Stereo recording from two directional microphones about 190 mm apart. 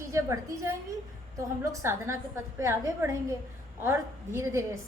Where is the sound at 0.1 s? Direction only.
15° right (ahead or behind).